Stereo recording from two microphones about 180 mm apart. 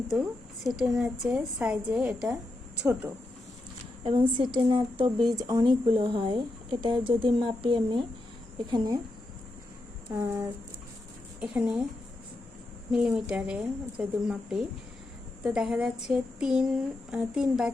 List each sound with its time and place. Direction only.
0.1 s a woman's voice: 5° right (ahead or behind)
4.0 s speech: 30° right (ahead or behind)
10.1 s a woman's voice: 15° right (ahead or behind)
12.9 s a woman's voice: 5° right (ahead or behind)